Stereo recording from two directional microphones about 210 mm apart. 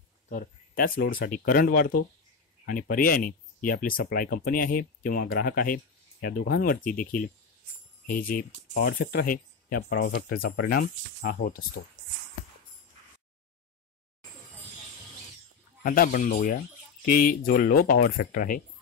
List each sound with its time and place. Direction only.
0.3 s speech: 40° left (ahead or behind)
15.8 s speech: 40° left (ahead or behind)